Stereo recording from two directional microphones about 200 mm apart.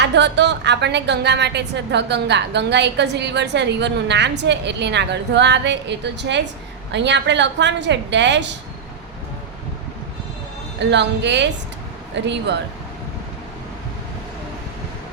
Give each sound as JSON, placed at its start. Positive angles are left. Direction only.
{"t": 0.0, "sound": "a woman's voice", "side_deg": -60}
{"t": 10.8, "sound": "a woman's voice", "side_deg": -60}